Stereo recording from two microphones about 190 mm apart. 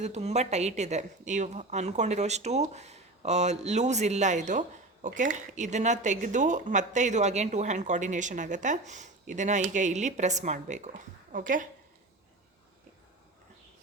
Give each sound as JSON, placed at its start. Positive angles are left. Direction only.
{"t": 0.0, "sound": "speech", "side_deg": -35}